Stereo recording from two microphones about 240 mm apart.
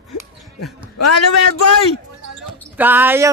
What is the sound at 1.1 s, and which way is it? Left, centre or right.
Speech, left.